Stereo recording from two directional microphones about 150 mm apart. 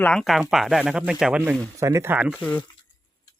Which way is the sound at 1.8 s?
20° right (ahead or behind).